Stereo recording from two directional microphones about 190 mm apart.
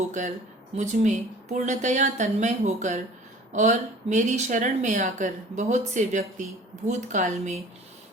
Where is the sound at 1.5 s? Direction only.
40° right (ahead or behind).